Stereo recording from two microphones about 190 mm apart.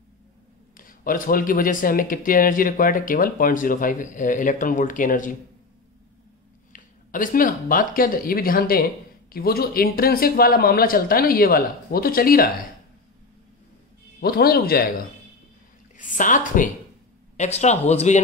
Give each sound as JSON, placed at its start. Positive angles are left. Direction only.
{"t": 0.7, "sound": "speech", "side_deg": 45}
{"t": 6.7, "sound": "speech", "side_deg": 45}
{"t": 14.2, "sound": "speech", "side_deg": 55}